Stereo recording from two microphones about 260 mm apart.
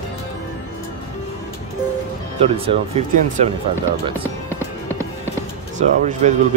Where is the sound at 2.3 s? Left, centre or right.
Right.